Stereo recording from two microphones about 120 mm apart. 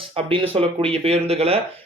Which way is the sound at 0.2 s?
50° right (ahead or behind).